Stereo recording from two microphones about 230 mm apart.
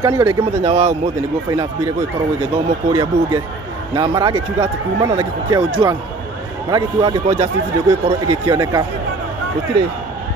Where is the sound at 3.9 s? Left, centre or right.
Centre.